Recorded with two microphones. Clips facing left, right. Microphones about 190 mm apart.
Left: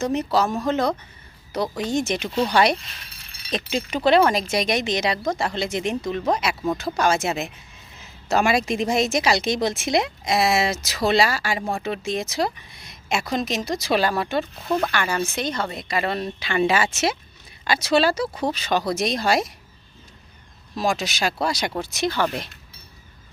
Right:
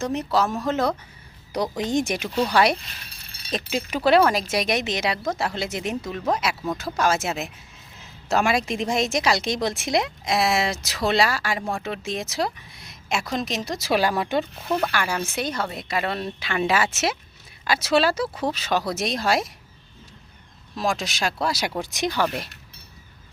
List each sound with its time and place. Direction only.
0.0 s a woman's voice: centre (ahead or behind)
1.5 s speech: 15° right (ahead or behind)
2.1 s a woman's voice: 5° right (ahead or behind)
14.8 s a woman's voice: 5° right (ahead or behind)
20.7 s a woman's voice: centre (ahead or behind)
21.8 s speech: 15° right (ahead or behind)